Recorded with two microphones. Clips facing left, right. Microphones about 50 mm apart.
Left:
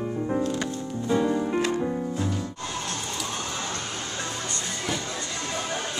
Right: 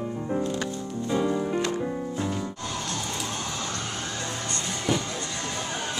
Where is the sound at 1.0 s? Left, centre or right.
Centre.